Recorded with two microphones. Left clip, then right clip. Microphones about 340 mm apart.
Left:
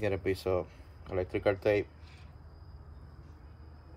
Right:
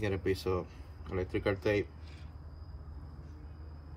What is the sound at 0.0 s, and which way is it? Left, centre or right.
Speech, left.